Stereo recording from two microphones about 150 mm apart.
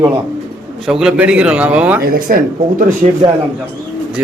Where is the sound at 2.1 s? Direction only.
70° right (ahead or behind).